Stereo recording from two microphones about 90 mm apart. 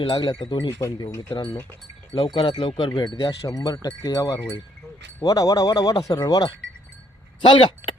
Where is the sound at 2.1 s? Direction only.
70° left (ahead or behind).